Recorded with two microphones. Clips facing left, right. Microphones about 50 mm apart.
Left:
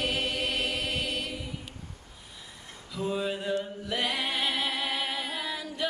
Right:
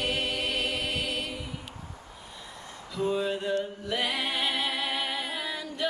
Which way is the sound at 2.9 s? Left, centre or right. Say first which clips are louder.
Right 2 dB; centre.